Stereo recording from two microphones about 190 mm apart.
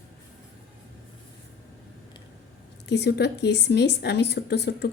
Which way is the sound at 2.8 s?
60° left (ahead or behind).